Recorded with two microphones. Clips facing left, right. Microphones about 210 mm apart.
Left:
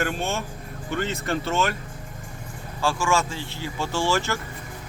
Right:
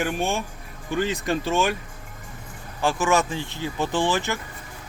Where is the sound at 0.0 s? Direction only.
15° right (ahead or behind).